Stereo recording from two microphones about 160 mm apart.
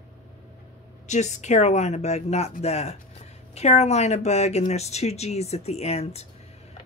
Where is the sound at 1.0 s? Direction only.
45° left (ahead or behind).